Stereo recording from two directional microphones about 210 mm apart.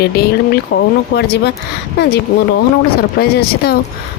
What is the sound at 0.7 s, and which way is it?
Speech, 60° left (ahead or behind).